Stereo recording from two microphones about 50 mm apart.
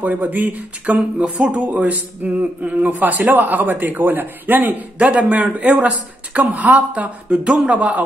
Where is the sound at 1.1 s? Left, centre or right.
Right.